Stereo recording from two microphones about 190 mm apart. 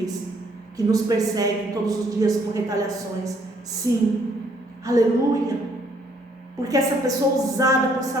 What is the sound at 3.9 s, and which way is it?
A woman's voice, 20° right (ahead or behind).